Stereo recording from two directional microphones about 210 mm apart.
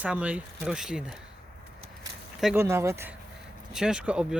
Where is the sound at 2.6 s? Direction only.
15° right (ahead or behind).